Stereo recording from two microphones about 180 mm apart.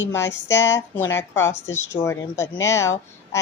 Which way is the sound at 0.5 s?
85° left.